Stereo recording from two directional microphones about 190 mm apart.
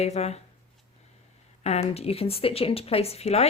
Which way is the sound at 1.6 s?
35° left (ahead or behind).